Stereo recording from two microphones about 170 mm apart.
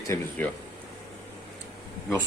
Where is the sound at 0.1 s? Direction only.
15° left (ahead or behind).